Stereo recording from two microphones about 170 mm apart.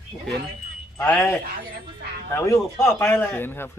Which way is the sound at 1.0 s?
10° left (ahead or behind).